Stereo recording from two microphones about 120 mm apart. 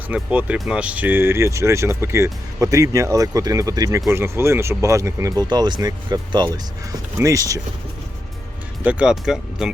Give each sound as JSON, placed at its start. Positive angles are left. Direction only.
{"t": 0.1, "sound": "speech", "side_deg": -10}
{"t": 8.8, "sound": "speech", "side_deg": -10}